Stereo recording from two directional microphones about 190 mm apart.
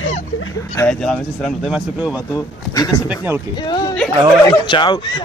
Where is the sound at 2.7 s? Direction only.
20° left (ahead or behind).